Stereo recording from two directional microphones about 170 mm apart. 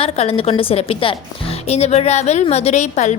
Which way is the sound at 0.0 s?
35° left (ahead or behind).